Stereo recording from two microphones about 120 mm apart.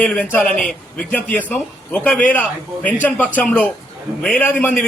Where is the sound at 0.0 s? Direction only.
10° left (ahead or behind).